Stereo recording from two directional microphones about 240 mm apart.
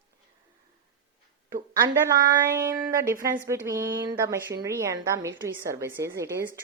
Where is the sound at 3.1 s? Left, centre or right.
Right.